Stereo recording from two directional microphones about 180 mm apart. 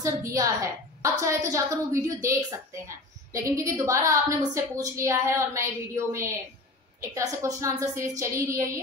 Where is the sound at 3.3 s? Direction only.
15° right (ahead or behind).